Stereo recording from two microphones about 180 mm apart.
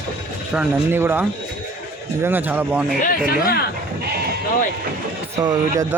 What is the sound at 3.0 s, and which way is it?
Speech, 55° left (ahead or behind).